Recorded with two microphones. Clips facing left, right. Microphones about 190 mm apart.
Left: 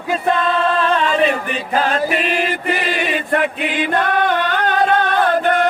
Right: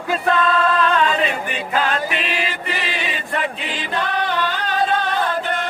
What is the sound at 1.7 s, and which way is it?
Chant, 40° left (ahead or behind).